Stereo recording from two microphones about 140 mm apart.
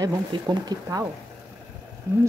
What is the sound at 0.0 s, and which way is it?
Speech, 30° right (ahead or behind).